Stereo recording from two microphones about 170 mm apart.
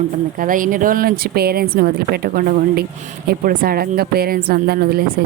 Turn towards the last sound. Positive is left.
turn(degrees=-65)  # may be behind; listen again after turning